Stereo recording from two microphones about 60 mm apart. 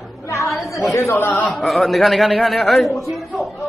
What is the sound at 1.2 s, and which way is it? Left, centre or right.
Speech, left.